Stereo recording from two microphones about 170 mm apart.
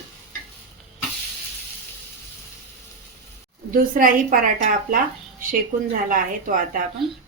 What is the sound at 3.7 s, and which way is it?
A woman's voice, 55° right (ahead or behind).